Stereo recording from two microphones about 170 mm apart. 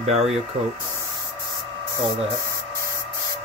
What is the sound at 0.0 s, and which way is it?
Speech, 40° right (ahead or behind).